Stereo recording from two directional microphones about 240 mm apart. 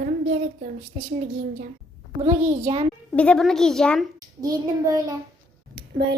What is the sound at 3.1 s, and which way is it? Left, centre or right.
Speech, centre.